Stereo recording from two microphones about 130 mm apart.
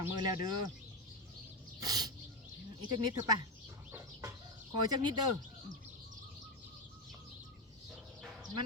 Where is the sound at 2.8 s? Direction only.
35° right (ahead or behind).